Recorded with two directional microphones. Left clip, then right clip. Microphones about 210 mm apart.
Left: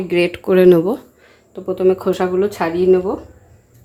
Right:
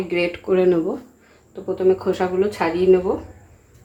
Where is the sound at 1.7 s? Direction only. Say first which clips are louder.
Left 3 dB; 45° left (ahead or behind).